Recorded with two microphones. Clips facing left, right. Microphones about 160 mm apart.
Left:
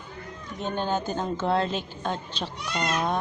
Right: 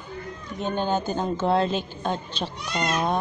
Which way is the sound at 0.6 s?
15° right (ahead or behind).